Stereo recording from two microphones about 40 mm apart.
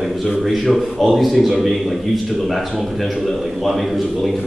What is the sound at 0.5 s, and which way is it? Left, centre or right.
A man's voice, centre.